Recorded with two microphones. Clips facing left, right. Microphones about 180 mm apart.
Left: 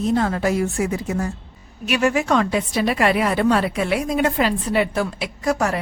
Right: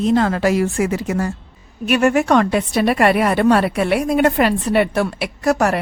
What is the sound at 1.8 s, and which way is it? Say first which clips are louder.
A woman's voice: right 4 dB; 55° right (ahead or behind).